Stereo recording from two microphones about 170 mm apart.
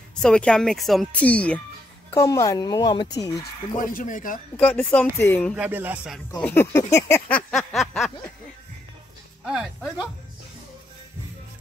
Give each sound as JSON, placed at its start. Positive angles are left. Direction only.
{"t": 0.2, "sound": "speech", "side_deg": 5}
{"t": 2.1, "sound": "speech", "side_deg": 20}
{"t": 3.7, "sound": "speech", "side_deg": 50}
{"t": 4.6, "sound": "a sound", "side_deg": 5}
{"t": 5.6, "sound": "music", "side_deg": -10}
{"t": 6.4, "sound": "a sound", "side_deg": 15}
{"t": 9.5, "sound": "speech", "side_deg": -5}